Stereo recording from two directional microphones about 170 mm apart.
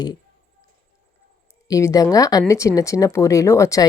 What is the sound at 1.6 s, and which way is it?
A woman's voice, 20° left (ahead or behind).